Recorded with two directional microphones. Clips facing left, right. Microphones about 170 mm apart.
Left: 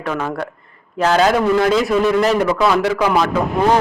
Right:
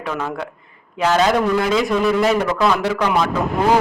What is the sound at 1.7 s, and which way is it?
Speech, centre (ahead or behind).